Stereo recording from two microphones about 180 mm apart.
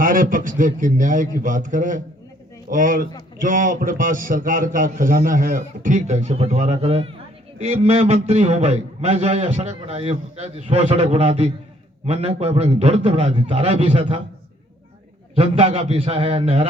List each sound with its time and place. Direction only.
0.0 s a man's voice: 50° right (ahead or behind)
15.4 s a man's voice: 30° right (ahead or behind)